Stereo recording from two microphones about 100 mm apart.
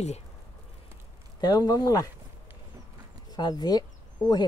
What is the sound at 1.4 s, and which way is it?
Speech, 40° left (ahead or behind).